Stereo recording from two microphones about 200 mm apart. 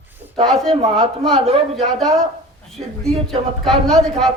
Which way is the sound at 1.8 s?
Centre (ahead or behind).